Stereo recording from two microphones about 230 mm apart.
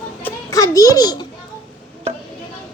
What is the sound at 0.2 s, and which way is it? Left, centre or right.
Children playing, centre.